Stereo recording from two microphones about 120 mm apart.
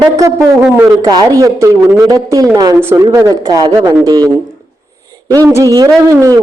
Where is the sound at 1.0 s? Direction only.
30° right (ahead or behind).